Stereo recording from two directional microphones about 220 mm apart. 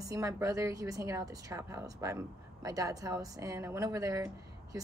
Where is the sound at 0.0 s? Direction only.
15° right (ahead or behind).